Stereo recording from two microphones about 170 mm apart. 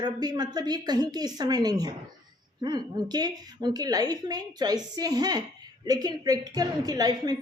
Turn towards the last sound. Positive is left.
turn(degrees=-20)  # may be behind; listen again after turning